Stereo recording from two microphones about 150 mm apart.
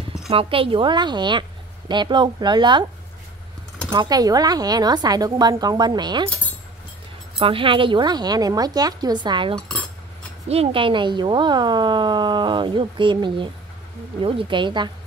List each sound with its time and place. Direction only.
0.3 s speech: 40° right (ahead or behind)
3.9 s speech: 30° right (ahead or behind)
7.3 s speech: 35° right (ahead or behind)